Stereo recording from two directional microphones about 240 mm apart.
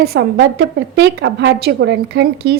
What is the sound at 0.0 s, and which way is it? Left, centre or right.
A woman's voice, right.